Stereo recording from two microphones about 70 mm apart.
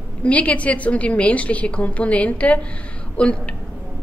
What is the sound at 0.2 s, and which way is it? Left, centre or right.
A woman's voice, centre.